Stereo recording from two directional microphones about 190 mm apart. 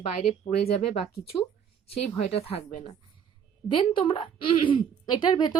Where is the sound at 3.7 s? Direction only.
25° left (ahead or behind).